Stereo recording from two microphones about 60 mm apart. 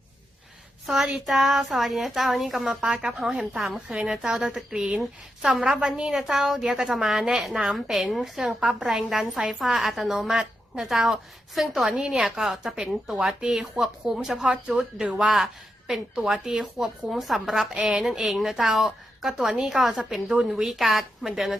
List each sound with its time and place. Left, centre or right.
1.3 s a woman's voice: centre
15.0 s speech: centre
15.9 s a woman's voice: centre